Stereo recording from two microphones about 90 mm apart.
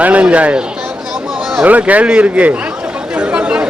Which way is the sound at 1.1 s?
5° right (ahead or behind).